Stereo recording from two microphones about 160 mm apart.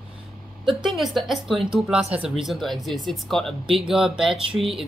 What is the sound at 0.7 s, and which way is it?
Speech, centre (ahead or behind).